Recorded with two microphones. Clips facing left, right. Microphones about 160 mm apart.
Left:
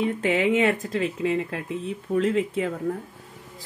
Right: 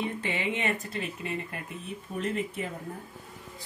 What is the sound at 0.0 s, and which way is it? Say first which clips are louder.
A woman's voice: left 9 dB; 90° left.